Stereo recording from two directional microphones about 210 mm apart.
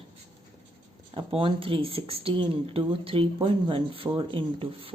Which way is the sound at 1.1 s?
25° right (ahead or behind).